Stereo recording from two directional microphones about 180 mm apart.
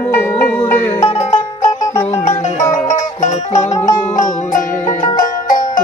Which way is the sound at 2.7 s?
45° left (ahead or behind).